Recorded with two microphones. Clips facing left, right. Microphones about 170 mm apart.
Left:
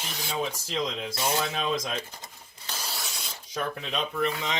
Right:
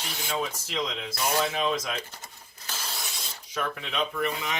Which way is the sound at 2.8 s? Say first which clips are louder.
Left 1 dB; centre (ahead or behind).